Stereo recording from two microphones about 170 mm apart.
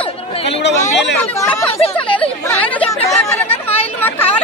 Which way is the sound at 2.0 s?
30° left (ahead or behind).